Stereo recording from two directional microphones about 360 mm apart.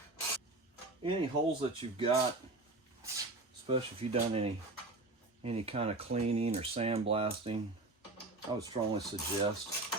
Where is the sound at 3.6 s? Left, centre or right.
Centre.